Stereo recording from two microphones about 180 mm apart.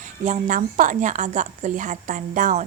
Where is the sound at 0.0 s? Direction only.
45° right (ahead or behind).